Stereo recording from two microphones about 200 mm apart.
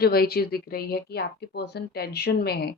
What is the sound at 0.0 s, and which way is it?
Speech, 50° left (ahead or behind).